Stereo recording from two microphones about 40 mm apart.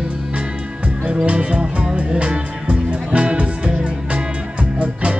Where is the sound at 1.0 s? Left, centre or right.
Right.